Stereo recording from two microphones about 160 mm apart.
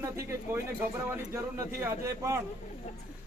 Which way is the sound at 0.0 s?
15° right (ahead or behind).